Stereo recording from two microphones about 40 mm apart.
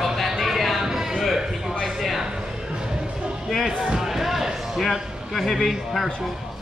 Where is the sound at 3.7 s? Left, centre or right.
Centre.